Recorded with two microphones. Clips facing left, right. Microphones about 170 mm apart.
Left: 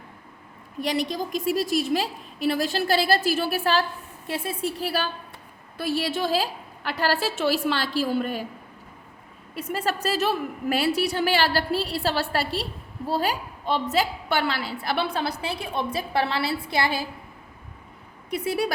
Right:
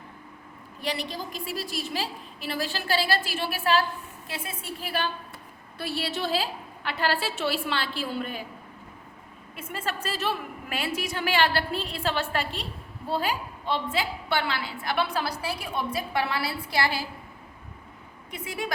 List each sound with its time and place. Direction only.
0.8 s a woman's voice: 45° left (ahead or behind)
9.6 s a woman's voice: 40° left (ahead or behind); by 17.0 s 20° left (ahead or behind)
18.3 s a woman's voice: 40° left (ahead or behind)